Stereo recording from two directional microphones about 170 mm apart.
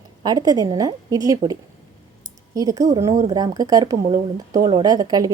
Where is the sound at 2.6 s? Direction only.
20° right (ahead or behind).